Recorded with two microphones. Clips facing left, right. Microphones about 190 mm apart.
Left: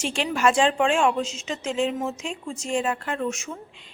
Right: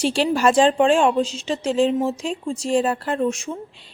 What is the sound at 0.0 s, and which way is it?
A woman's voice, 35° right (ahead or behind).